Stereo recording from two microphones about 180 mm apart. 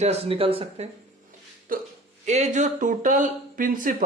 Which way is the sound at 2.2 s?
40° right (ahead or behind).